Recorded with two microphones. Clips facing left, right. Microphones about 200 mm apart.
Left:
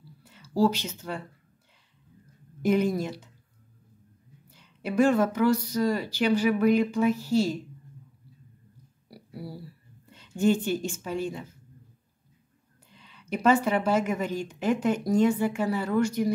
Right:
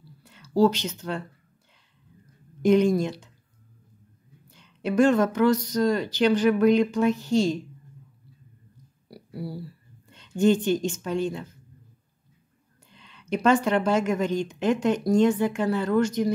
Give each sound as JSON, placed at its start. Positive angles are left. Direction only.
{"t": 0.2, "sound": "speech", "side_deg": 5}
{"t": 2.6, "sound": "a woman's voice", "side_deg": 5}
{"t": 4.6, "sound": "a woman's voice", "side_deg": 10}
{"t": 9.1, "sound": "a sound", "side_deg": 10}
{"t": 10.0, "sound": "speech", "side_deg": 5}
{"t": 12.9, "sound": "a woman's voice", "side_deg": 5}